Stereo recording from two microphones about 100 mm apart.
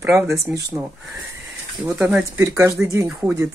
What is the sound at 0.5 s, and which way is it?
Speech, 10° right (ahead or behind).